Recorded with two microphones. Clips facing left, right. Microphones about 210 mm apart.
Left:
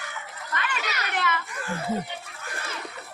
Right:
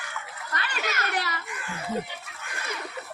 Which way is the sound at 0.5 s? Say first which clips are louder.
Even; 40° right (ahead or behind).